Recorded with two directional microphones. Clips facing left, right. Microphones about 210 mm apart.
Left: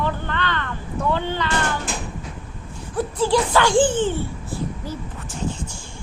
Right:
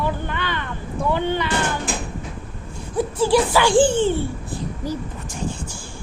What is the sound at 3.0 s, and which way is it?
A child's voice, 10° right (ahead or behind).